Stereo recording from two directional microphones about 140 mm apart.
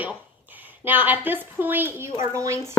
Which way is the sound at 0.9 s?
10° right (ahead or behind).